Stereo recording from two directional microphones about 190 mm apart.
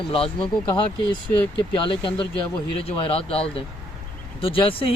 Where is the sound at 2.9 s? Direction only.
30° left (ahead or behind).